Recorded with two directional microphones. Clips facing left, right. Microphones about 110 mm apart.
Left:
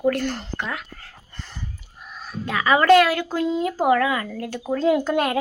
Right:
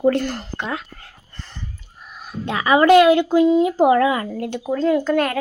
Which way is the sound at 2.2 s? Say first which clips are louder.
Right 1 dB; 25° right (ahead or behind).